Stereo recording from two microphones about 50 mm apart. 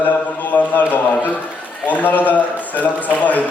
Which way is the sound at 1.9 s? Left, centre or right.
Left.